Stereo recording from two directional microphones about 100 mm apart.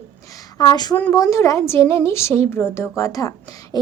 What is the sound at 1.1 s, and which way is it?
A woman's voice, 30° left (ahead or behind).